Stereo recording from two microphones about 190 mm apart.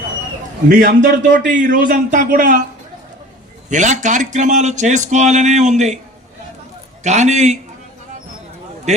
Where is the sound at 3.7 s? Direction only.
40° right (ahead or behind).